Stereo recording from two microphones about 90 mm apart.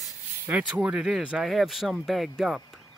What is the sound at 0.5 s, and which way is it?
Speech, 15° right (ahead or behind).